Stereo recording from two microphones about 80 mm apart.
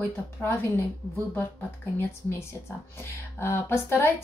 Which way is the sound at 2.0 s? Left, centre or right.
Left.